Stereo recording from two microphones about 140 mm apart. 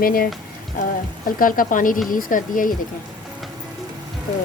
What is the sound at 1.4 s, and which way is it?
Speech, 75° left (ahead or behind).